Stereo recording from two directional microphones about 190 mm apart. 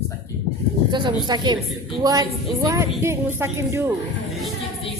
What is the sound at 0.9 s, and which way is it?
A woman's voice, 25° right (ahead or behind).